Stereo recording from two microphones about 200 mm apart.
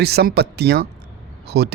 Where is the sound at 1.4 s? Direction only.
55° right (ahead or behind).